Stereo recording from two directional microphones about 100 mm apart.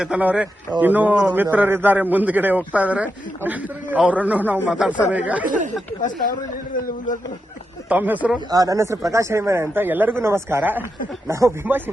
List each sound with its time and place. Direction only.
0.0 s a man's voice: 10° right (ahead or behind)
7.9 s a man's voice: 15° right (ahead or behind)
8.4 s speech: 35° right (ahead or behind); by 10.8 s 20° right (ahead or behind)
11.3 s speech: 30° right (ahead or behind)